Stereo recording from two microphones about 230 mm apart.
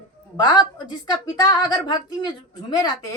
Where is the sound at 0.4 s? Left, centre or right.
Centre.